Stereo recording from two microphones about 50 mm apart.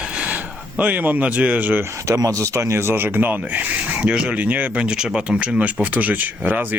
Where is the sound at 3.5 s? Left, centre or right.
Right.